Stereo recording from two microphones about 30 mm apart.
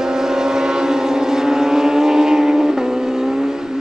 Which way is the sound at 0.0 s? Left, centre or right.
Centre.